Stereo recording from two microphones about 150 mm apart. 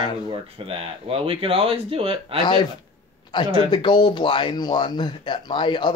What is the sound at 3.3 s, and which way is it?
Speech, 30° left (ahead or behind).